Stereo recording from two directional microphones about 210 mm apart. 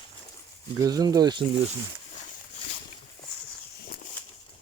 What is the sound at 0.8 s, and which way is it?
Speech, 15° right (ahead or behind).